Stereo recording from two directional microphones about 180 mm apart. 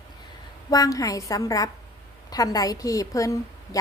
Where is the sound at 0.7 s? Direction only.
20° left (ahead or behind).